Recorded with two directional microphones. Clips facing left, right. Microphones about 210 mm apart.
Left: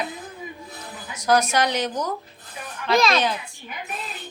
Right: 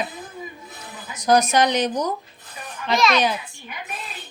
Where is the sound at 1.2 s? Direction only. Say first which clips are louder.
Right 3 dB; 15° right (ahead or behind).